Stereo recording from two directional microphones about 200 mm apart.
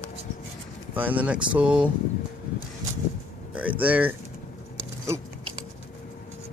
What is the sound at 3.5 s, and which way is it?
Speech, 10° right (ahead or behind).